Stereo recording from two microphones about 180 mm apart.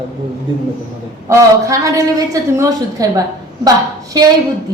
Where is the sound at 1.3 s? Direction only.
15° right (ahead or behind).